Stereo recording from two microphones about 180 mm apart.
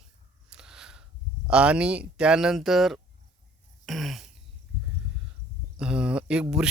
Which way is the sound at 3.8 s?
Centre (ahead or behind).